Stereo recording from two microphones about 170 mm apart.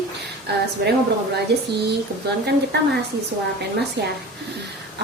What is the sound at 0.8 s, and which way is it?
Speech, 75° right (ahead or behind).